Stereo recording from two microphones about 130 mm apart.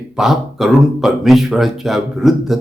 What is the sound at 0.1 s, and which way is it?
Speech, 5° right (ahead or behind).